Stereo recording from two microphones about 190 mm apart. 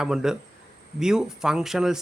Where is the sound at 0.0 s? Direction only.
5° right (ahead or behind).